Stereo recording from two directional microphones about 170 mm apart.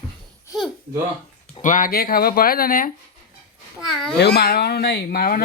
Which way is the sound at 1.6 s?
50° left (ahead or behind).